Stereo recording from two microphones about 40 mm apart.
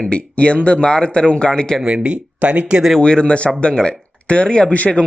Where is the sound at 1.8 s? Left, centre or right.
Right.